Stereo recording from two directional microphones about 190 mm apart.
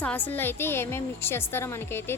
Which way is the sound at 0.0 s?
10° left (ahead or behind).